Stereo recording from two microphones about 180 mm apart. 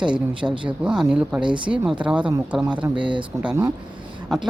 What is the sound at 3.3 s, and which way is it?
Speech, 20° right (ahead or behind).